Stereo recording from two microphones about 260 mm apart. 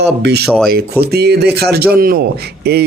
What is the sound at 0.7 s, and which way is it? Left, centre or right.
Speech, right.